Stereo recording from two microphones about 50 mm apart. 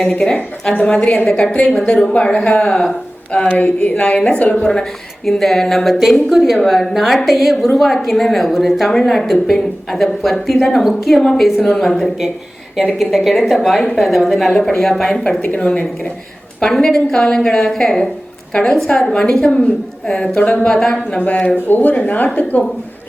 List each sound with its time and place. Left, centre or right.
0.0 s a woman's voice: centre
1.5 s speech: left
2.6 s a woman's voice: centre
3.6 s speech: left
4.6 s a woman's voice: centre
13.1 s a woman's voice: centre
15.5 s speech: left
16.6 s a woman's voice: centre
20.3 s speech: left
20.7 s a woman's voice: centre
21.2 s speech: left